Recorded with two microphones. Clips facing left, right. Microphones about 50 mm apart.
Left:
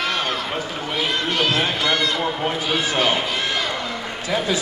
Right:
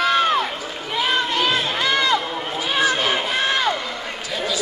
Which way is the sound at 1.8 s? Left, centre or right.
Right.